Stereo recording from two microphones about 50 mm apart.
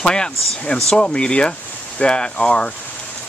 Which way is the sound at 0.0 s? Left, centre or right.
Centre.